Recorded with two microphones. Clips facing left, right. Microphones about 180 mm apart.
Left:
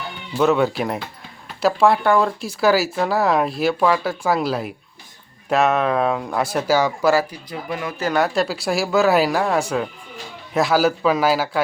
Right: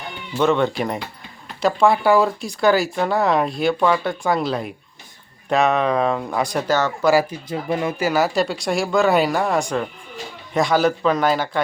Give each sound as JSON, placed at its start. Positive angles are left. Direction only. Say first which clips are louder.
{"t": 0.0, "sound": "speech", "louder": "left 1 dB", "side_deg": 5}
{"t": 7.1, "sound": "speech", "louder": "right 3 dB", "side_deg": -15}
{"t": 7.5, "sound": "speech", "louder": "right 5 dB", "side_deg": -30}
{"t": 7.9, "sound": "speech", "louder": "left 2 dB", "side_deg": -5}